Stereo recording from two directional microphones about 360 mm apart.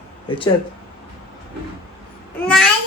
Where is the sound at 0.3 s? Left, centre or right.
Centre.